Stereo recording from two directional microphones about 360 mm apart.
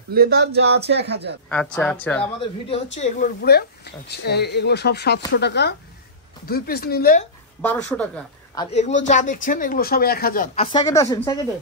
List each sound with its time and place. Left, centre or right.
0.1 s speech: right
1.5 s speech: centre
2.7 s speech: centre
7.6 s speech: centre
8.5 s speech: centre